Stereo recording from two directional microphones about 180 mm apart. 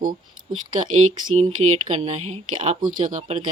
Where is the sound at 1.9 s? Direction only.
45° right (ahead or behind).